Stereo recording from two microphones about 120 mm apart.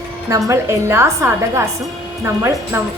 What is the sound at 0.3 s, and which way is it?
A woman's voice, 25° right (ahead or behind).